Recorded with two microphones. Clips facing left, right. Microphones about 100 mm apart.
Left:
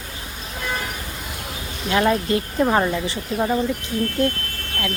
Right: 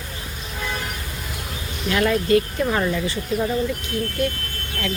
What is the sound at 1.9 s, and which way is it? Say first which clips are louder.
Speech: right 1 dB; 25° left (ahead or behind).